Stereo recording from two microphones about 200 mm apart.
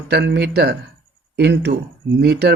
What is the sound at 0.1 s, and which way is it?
Speech, 55° right (ahead or behind).